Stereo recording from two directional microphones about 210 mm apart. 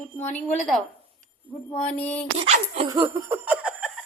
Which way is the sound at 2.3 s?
30° right (ahead or behind).